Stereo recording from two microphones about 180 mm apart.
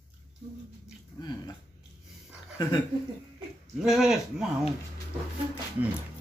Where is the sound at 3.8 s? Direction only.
5° right (ahead or behind).